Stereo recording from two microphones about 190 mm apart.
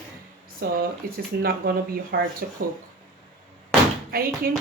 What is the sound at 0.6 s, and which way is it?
A woman's voice, 55° right (ahead or behind).